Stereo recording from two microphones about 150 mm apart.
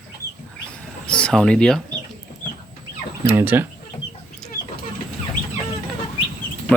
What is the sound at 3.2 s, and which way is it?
Speech, 15° right (ahead or behind).